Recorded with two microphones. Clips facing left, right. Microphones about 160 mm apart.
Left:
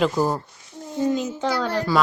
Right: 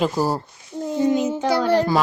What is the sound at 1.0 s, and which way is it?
Speech, 70° right (ahead or behind).